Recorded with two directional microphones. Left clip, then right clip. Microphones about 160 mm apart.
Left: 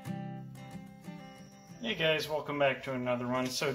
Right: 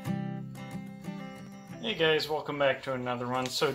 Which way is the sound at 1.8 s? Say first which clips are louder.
Right 3 dB; 35° right (ahead or behind).